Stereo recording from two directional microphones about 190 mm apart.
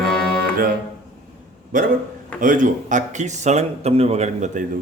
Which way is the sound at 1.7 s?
45° right (ahead or behind).